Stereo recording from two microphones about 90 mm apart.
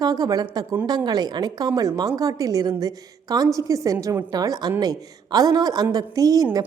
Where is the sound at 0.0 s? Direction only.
45° right (ahead or behind).